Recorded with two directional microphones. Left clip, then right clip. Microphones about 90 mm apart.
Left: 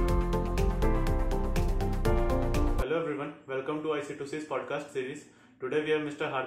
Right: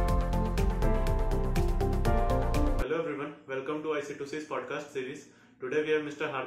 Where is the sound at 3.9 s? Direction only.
Centre (ahead or behind).